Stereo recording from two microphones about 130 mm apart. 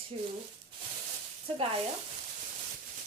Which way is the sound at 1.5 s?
45° right (ahead or behind).